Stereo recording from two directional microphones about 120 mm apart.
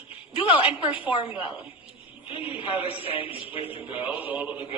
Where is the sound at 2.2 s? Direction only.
50° left (ahead or behind).